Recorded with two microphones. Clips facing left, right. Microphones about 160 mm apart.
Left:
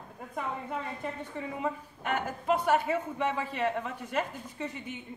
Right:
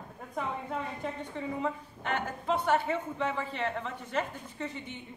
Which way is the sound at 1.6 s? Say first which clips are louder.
Even; 10° left (ahead or behind).